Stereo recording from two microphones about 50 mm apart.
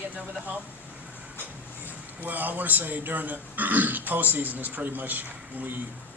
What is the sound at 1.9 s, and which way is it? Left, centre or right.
Speech, right.